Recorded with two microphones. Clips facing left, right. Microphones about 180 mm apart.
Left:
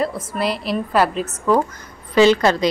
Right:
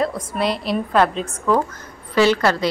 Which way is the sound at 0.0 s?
5° left (ahead or behind).